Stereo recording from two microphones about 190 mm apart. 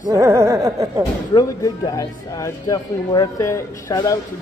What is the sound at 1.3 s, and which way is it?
Speech, 20° left (ahead or behind).